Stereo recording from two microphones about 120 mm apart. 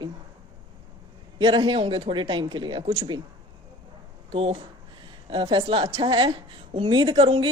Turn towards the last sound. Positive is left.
turn(degrees=-50)  # may be behind; listen again after turning